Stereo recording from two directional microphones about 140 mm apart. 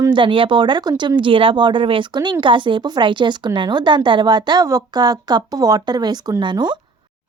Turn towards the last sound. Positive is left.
turn(degrees=-30)  # may be behind; listen again after turning